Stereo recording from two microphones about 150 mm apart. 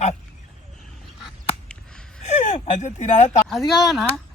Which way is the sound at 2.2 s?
55° left (ahead or behind).